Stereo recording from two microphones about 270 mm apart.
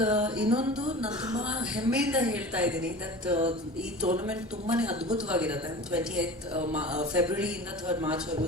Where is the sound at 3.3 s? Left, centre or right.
Right.